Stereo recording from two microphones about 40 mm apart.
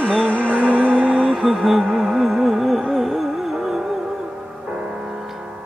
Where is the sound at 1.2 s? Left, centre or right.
Centre.